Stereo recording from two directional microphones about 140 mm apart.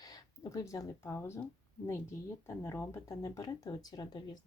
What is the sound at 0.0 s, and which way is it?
Speech, 25° left (ahead or behind).